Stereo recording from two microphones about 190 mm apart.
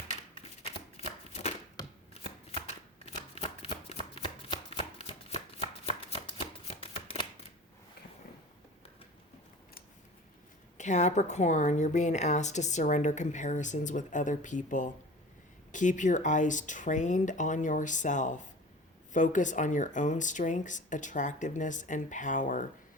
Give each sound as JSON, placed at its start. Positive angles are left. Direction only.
{"t": 0.6, "sound": "shuffling cards", "side_deg": 35}
{"t": 3.6, "sound": "chopping", "side_deg": 30}
{"t": 10.8, "sound": "speech", "side_deg": 40}